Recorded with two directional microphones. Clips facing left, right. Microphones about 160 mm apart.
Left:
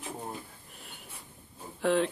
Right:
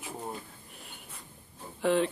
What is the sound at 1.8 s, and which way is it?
Speech, centre (ahead or behind).